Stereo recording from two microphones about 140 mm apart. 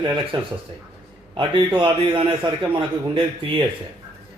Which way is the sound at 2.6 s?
35° right (ahead or behind).